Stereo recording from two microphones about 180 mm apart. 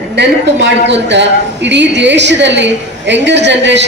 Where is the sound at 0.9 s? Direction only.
80° right.